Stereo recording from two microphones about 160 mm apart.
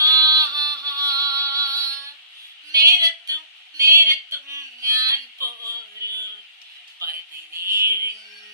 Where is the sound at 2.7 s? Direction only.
20° right (ahead or behind).